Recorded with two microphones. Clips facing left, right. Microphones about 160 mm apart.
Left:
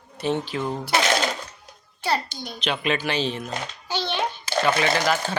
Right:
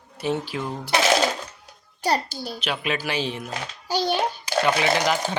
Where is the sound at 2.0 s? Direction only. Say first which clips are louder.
Right 2 dB; 40° right (ahead or behind).